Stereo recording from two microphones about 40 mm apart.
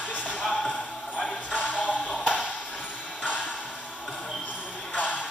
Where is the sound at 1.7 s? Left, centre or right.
Left.